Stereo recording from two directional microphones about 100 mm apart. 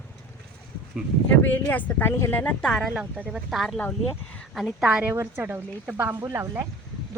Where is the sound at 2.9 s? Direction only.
15° right (ahead or behind).